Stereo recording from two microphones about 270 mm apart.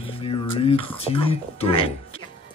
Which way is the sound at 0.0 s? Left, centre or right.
Left.